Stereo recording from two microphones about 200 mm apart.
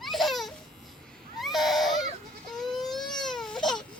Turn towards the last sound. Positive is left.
turn(degrees=0)  # may be behind; listen again after turning